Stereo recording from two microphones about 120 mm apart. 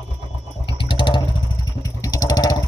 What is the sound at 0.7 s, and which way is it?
Vehicle, 45° left (ahead or behind).